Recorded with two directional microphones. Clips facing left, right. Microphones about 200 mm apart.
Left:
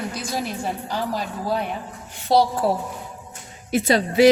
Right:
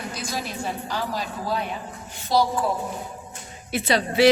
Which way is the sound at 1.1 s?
55° left (ahead or behind).